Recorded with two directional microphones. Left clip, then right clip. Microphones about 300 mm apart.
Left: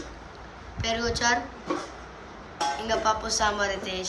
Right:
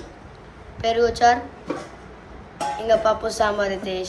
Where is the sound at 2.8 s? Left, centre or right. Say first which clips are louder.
Right 9 dB; centre.